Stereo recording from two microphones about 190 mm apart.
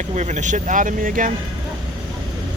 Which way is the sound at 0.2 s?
40° right (ahead or behind).